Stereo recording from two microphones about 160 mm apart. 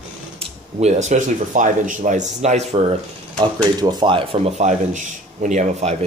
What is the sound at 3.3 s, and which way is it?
Speech, 25° right (ahead or behind).